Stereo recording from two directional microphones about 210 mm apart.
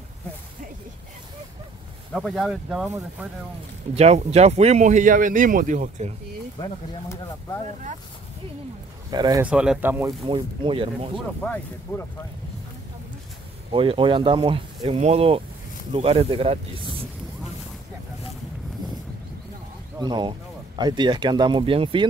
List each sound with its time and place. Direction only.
2.1 s speech: centre (ahead or behind)
3.9 s speech: 30° right (ahead or behind)
9.1 s speech: 20° right (ahead or behind)
9.4 s speech: 5° right (ahead or behind)
10.2 s speech: 25° right (ahead or behind)
11.4 s speech: 10° left (ahead or behind)
13.7 s speech: 25° right (ahead or behind)
20.0 s speech: 20° right (ahead or behind)